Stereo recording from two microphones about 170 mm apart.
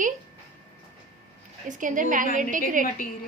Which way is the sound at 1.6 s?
50° right (ahead or behind).